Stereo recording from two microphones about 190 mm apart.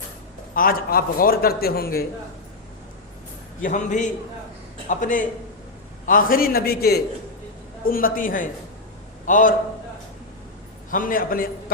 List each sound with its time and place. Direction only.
0.5 s a man's voice: 50° left (ahead or behind)
3.6 s a man's voice: 40° left (ahead or behind)
10.9 s a man's voice: 45° left (ahead or behind)